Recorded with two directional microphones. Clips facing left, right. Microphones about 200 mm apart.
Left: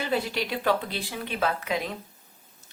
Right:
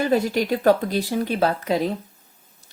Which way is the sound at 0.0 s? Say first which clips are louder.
Right 8 dB; 45° right (ahead or behind).